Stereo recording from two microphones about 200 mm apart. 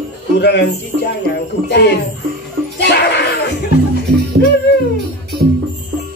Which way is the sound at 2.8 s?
55° left (ahead or behind).